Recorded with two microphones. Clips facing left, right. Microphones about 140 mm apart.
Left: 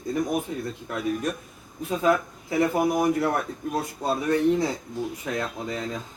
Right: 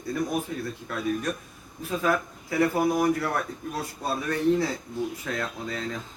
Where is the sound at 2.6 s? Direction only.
20° left (ahead or behind).